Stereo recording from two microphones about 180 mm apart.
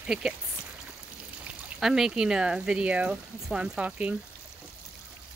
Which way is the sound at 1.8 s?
5° right (ahead or behind).